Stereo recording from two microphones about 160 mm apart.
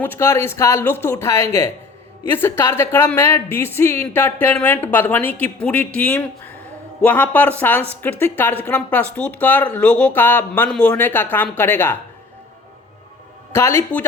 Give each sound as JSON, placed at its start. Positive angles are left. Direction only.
{"t": 0.0, "sound": "a woman's voice", "side_deg": 15}
{"t": 13.5, "sound": "a woman's voice", "side_deg": 15}